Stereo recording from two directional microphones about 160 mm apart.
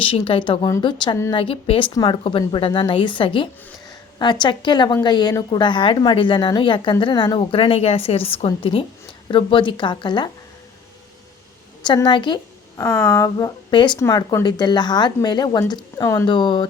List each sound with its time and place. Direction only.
0.0 s speech: 35° left (ahead or behind)
11.8 s speech: 25° left (ahead or behind)